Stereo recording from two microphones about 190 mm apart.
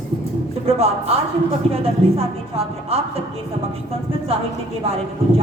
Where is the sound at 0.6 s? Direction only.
30° right (ahead or behind).